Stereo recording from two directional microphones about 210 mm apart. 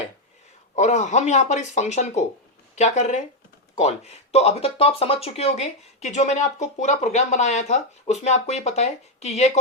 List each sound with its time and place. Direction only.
0.8 s speech: 35° left (ahead or behind)